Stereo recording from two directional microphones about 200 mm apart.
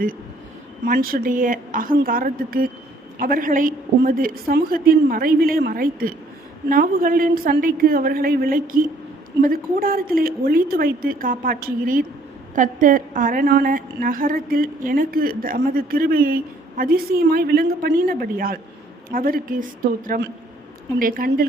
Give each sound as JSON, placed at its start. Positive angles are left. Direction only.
{"t": 0.9, "sound": "a woman's voice", "side_deg": -45}